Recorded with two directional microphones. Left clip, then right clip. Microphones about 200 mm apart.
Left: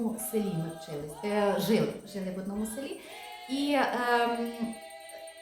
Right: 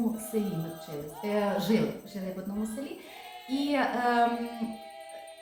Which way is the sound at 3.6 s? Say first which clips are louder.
Even; 20° left (ahead or behind).